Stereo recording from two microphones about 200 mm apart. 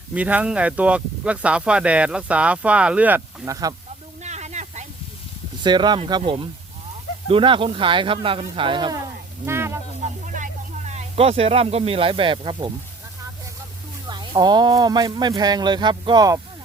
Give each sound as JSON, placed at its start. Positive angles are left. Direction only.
{"t": 0.1, "sound": "speech", "side_deg": -5}
{"t": 4.2, "sound": "snake", "side_deg": -35}
{"t": 5.6, "sound": "speech", "side_deg": -20}
{"t": 9.5, "sound": "a sound", "side_deg": -15}
{"t": 10.2, "sound": "speech", "side_deg": -40}
{"t": 14.1, "sound": "speech", "side_deg": -20}